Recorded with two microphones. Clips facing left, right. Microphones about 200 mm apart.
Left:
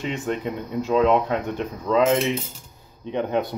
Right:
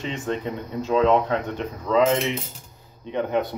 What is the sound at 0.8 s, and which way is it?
Speech, 15° left (ahead or behind).